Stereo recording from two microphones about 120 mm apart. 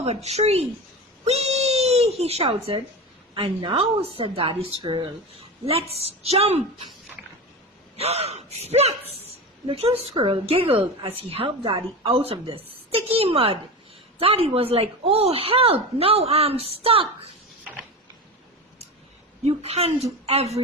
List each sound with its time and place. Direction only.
0.0 s speech: 60° right (ahead or behind)
1.2 s a sound: 60° right (ahead or behind)
3.3 s a woman's voice: 40° right (ahead or behind)
5.6 s speech: 55° right (ahead or behind)
7.9 s a woman's voice: 60° right (ahead or behind)
19.5 s speech: 60° right (ahead or behind)